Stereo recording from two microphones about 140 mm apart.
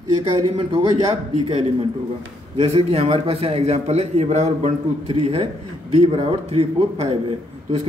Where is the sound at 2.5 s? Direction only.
45° right (ahead or behind).